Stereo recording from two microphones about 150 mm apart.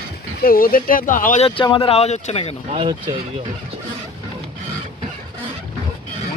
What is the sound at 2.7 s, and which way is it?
Speech, 30° right (ahead or behind).